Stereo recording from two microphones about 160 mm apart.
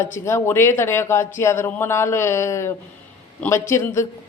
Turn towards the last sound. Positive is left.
turn(degrees=15)  # may be behind; listen again after turning